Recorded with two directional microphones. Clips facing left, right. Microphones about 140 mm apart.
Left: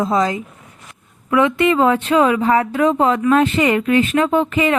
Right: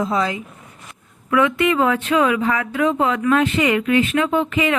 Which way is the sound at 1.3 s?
25° left (ahead or behind).